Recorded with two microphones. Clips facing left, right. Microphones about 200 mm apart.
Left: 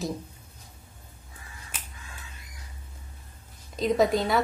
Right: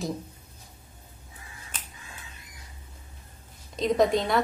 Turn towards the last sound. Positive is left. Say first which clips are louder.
# even
turn(degrees=0)  # may be behind; listen again after turning